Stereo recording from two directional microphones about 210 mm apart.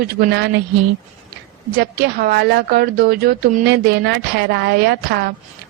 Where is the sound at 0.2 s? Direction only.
55° right (ahead or behind).